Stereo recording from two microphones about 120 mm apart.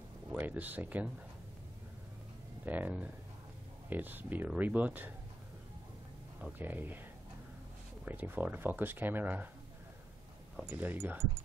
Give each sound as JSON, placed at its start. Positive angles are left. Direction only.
{"t": 0.3, "sound": "speech", "side_deg": -15}
{"t": 2.6, "sound": "speech", "side_deg": -15}
{"t": 6.6, "sound": "speech", "side_deg": -15}
{"t": 8.0, "sound": "speech", "side_deg": -15}
{"t": 10.5, "sound": "a sound", "side_deg": -5}
{"t": 10.8, "sound": "speech", "side_deg": -15}